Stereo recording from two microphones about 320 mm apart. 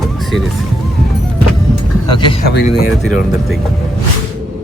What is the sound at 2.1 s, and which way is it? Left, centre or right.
Speech, centre.